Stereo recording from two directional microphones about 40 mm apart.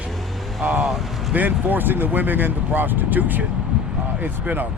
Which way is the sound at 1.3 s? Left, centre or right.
Right.